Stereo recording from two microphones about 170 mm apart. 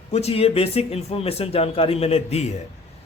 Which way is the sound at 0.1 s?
35° left (ahead or behind).